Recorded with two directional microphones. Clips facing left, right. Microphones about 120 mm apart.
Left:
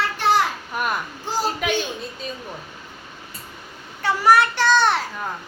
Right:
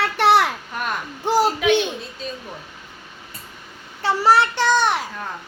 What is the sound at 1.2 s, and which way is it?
Speech, 65° right (ahead or behind).